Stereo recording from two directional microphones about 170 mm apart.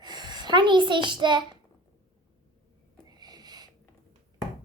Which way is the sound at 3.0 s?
25° right (ahead or behind).